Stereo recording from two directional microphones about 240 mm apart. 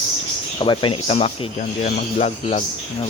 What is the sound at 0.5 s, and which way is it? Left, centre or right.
Speech, centre.